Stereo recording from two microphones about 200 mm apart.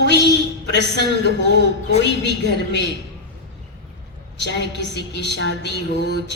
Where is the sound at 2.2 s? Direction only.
60° left (ahead or behind).